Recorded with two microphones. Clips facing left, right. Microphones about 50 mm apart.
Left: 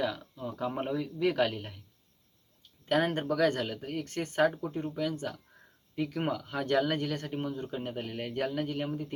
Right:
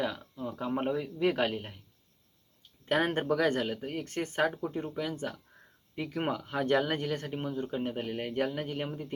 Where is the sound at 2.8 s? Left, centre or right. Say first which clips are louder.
Even; right.